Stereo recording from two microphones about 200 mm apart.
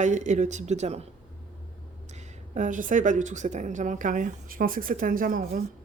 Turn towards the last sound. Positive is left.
turn(degrees=-45)  # may be behind; listen again after turning